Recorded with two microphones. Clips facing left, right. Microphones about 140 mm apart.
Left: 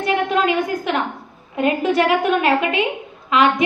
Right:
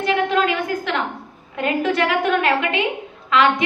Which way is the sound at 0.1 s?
20° left (ahead or behind).